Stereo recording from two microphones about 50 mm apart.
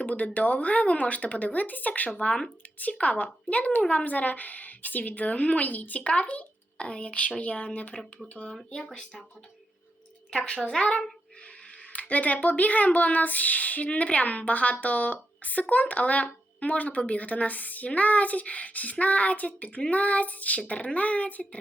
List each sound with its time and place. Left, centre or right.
0.0 s a woman's voice: left
8.7 s speech: centre
10.4 s speech: left